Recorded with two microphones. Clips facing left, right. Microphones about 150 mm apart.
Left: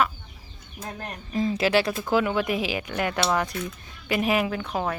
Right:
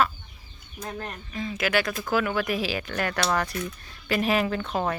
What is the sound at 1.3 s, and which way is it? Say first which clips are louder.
Speech: left 5 dB; 35° left (ahead or behind).